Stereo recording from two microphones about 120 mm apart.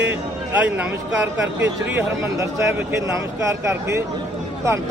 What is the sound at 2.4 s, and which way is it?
Speech, 25° right (ahead or behind).